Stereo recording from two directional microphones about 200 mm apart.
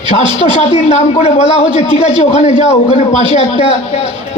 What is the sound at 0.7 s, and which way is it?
A man's voice, 30° left (ahead or behind).